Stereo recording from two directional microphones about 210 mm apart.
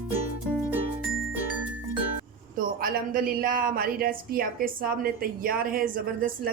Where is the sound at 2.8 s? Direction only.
45° right (ahead or behind).